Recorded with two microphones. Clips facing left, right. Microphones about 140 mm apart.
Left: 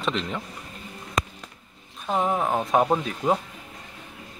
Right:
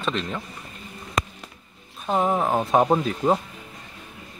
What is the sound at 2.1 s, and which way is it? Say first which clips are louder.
Speech: right 2 dB; 5° right (ahead or behind).